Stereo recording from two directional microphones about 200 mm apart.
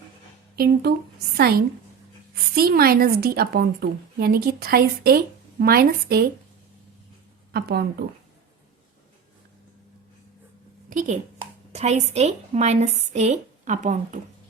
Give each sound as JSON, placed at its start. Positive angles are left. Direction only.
{"t": 0.5, "sound": "a woman's voice", "side_deg": -50}
{"t": 7.5, "sound": "a woman's voice", "side_deg": -50}
{"t": 10.8, "sound": "a woman's voice", "side_deg": -40}